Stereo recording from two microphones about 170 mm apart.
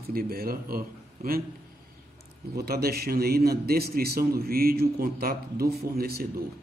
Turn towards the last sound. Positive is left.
turn(degrees=-65)  # may be behind; listen again after turning